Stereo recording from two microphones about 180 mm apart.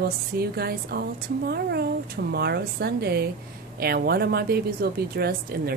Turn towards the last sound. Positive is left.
turn(degrees=-60)  # may be behind; listen again after turning